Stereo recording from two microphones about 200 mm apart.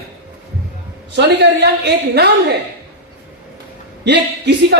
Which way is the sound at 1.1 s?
60° right (ahead or behind).